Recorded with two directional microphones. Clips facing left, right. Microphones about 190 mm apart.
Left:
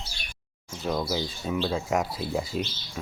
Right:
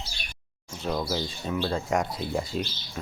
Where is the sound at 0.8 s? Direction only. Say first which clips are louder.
Left 1 dB; 5° right (ahead or behind).